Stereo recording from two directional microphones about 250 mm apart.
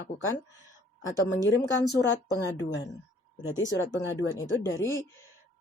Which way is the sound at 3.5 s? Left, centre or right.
Left.